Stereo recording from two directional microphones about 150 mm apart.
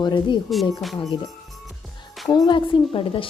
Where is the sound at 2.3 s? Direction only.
30° left (ahead or behind).